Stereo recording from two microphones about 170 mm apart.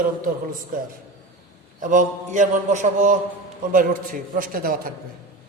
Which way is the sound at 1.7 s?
50° right (ahead or behind).